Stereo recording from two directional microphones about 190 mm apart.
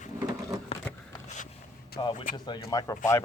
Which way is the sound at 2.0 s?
20° left (ahead or behind).